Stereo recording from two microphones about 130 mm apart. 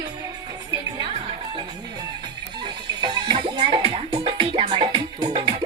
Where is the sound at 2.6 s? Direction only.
35° right (ahead or behind).